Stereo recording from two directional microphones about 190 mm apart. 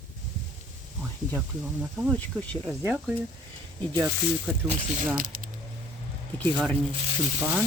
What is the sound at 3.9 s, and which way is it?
Speech, 15° right (ahead or behind).